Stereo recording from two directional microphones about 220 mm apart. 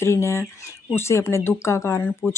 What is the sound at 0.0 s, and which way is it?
Speech, 10° left (ahead or behind).